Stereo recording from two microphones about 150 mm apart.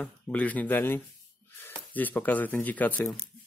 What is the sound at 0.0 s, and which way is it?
Speech, 10° left (ahead or behind).